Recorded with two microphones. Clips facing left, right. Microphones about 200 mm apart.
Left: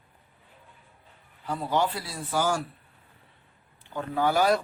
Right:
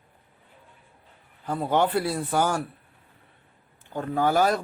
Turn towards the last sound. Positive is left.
turn(degrees=-45)  # may be behind; listen again after turning